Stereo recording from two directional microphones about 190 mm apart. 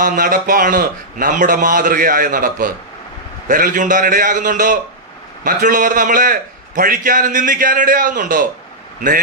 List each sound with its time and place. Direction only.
0.0 s a man's voice: 45° right (ahead or behind)